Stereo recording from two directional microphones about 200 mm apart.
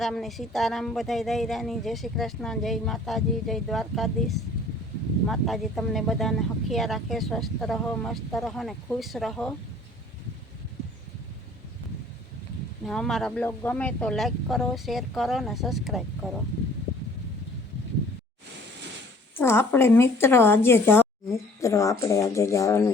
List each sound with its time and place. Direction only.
0.0 s speech: centre (ahead or behind)
12.8 s speech: centre (ahead or behind)
19.4 s speech: 10° left (ahead or behind)